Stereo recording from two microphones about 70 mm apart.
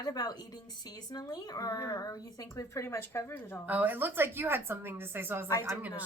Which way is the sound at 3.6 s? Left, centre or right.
Right.